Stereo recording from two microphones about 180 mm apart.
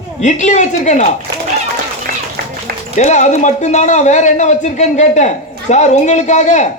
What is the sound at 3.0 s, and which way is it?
A man's voice, 40° left (ahead or behind).